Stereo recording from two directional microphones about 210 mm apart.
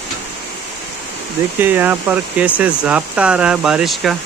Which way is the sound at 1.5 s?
10° right (ahead or behind).